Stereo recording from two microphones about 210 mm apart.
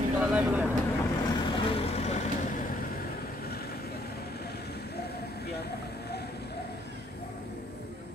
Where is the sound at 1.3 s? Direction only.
25° left (ahead or behind); by 6.6 s 50° left (ahead or behind).